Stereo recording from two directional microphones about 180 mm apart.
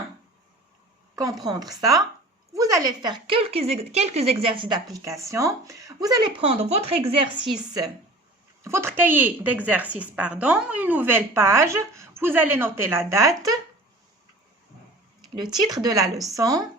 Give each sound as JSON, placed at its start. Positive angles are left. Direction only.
{"t": 1.1, "sound": "speech", "side_deg": -20}
{"t": 8.6, "sound": "a woman's voice", "side_deg": -15}
{"t": 15.4, "sound": "speech", "side_deg": -25}